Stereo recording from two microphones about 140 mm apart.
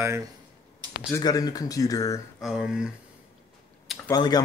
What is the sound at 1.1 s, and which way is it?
Speech, 25° left (ahead or behind).